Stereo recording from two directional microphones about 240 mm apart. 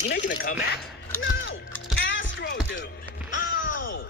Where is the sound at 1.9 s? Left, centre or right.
Left.